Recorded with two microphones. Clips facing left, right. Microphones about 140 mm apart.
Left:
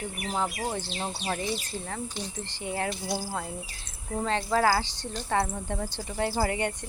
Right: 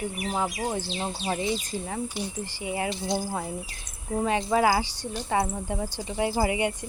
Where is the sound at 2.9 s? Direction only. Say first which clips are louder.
Right 3 dB; 20° right (ahead or behind).